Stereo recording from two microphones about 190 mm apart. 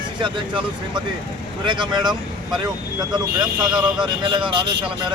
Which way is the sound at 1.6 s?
25° right (ahead or behind).